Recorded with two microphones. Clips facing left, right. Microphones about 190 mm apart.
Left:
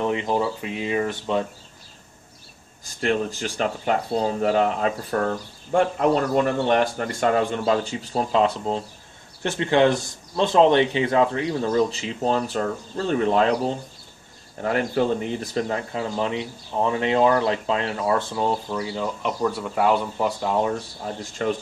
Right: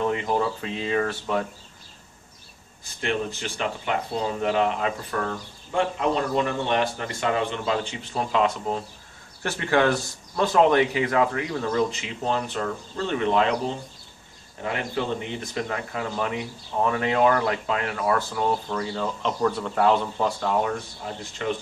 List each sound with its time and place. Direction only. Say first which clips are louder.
0.0 s speech: left 1 dB; 15° left (ahead or behind)
3.3 s speech: left 4 dB; 40° left (ahead or behind)
14.6 s speech: left 6 dB; 45° left (ahead or behind); by 18.5 s 25° left (ahead or behind)
18.7 s speech: left 1 dB; 10° left (ahead or behind)
21.4 s speech: left 3 dB; 45° left (ahead or behind)